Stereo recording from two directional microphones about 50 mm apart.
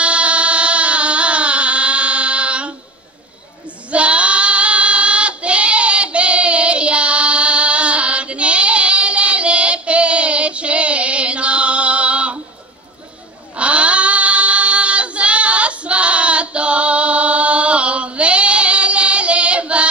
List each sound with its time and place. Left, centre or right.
0.0 s a sound: right
3.9 s child singing: right
13.6 s child singing: right